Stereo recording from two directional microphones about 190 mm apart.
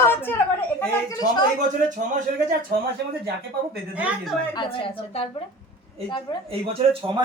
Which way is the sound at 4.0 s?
5° right (ahead or behind).